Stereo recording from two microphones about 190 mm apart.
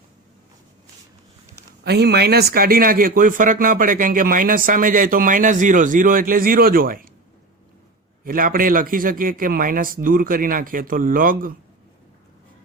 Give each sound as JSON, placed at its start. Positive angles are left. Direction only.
{"t": 1.8, "sound": "speech", "side_deg": -60}
{"t": 8.2, "sound": "speech", "side_deg": -45}